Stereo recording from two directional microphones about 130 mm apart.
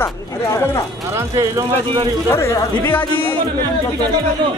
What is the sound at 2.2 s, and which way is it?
Speech, 20° left (ahead or behind).